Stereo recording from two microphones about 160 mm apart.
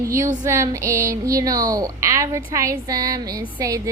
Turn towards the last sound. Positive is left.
turn(degrees=-20)  # may be behind; listen again after turning